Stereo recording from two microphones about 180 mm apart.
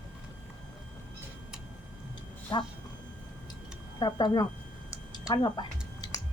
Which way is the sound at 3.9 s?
25° left (ahead or behind).